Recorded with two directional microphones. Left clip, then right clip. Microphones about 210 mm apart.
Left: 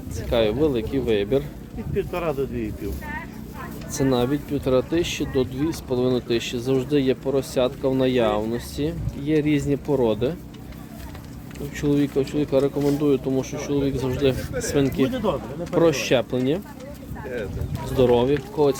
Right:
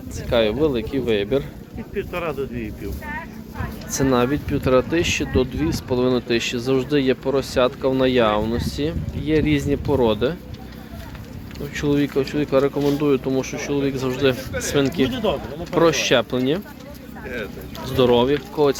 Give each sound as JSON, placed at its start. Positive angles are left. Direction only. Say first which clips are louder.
{"t": 0.3, "sound": "speech", "louder": "right 2 dB", "side_deg": 5}
{"t": 2.0, "sound": "speech", "louder": "left 1 dB", "side_deg": 25}
{"t": 4.1, "sound": "speech", "louder": "right 3 dB", "side_deg": 0}
{"t": 11.7, "sound": "speech", "louder": "right 2 dB", "side_deg": 5}
{"t": 17.8, "sound": "speech", "louder": "right 2 dB", "side_deg": 0}